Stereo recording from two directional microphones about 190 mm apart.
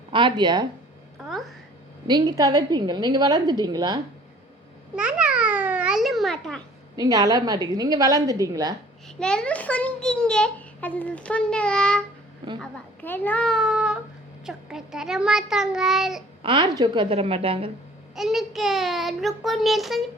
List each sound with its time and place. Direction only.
0.1 s a woman's voice: 25° right (ahead or behind)
1.3 s speech: centre (ahead or behind)
2.0 s a woman's voice: 20° right (ahead or behind)
4.9 s babbling: 5° right (ahead or behind)
6.9 s a woman's voice: 20° right (ahead or behind)
9.1 s a child's voice: 5° left (ahead or behind)
16.4 s a woman's voice: 25° right (ahead or behind)
18.1 s a child's voice: centre (ahead or behind)